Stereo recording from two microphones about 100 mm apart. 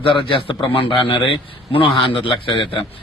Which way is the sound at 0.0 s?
60° left (ahead or behind).